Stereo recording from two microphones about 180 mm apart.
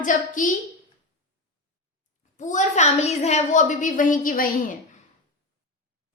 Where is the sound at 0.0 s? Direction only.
45° left (ahead or behind).